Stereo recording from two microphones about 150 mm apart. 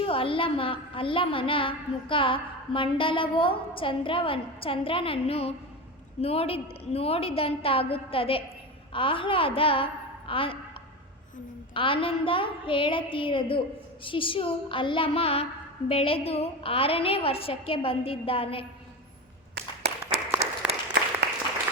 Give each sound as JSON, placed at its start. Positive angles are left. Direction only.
{"t": 0.0, "sound": "a woman's voice", "side_deg": 35}
{"t": 11.7, "sound": "a woman's voice", "side_deg": 35}
{"t": 19.5, "sound": "a sound", "side_deg": -90}
{"t": 20.4, "sound": "applause", "side_deg": -90}